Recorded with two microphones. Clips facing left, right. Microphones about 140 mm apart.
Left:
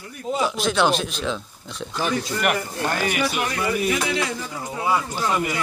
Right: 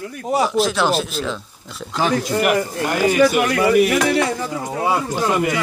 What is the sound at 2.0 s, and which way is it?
Speech, 90° right.